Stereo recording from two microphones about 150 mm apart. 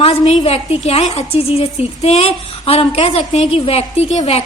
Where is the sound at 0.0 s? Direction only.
40° left (ahead or behind).